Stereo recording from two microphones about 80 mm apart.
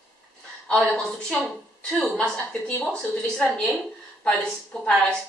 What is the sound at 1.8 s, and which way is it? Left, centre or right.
A woman's voice, centre.